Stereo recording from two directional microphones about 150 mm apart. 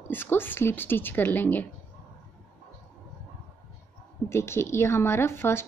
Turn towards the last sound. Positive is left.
turn(degrees=15)  # may be behind; listen again after turning